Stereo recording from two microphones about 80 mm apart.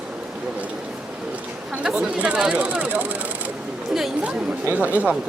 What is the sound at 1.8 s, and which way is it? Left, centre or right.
Speech, centre.